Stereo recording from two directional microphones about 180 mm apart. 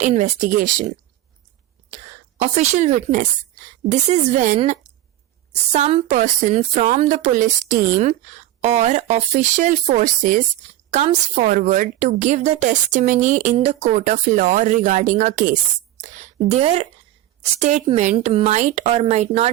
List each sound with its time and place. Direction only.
0.0 s a woman's voice: 40° right (ahead or behind)
2.4 s a woman's voice: 40° right (ahead or behind)